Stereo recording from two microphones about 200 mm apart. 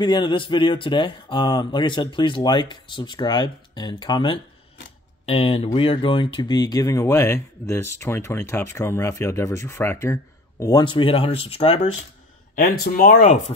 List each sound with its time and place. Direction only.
0.0 s speech: 25° left (ahead or behind)
12.5 s speech: 50° left (ahead or behind)